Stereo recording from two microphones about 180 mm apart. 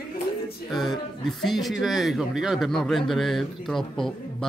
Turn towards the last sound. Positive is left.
turn(degrees=0)  # may be behind; listen again after turning